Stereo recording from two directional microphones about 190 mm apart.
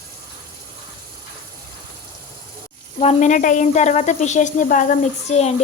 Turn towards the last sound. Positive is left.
turn(degrees=35)  # may be behind; listen again after turning